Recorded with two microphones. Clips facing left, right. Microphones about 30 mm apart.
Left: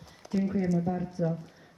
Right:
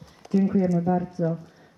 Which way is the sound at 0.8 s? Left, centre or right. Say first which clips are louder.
Right 7 dB; right.